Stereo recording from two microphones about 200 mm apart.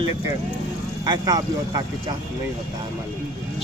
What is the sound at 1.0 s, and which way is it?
Speech, 20° right (ahead or behind).